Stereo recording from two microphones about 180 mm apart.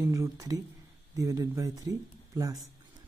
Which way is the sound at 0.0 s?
20° right (ahead or behind).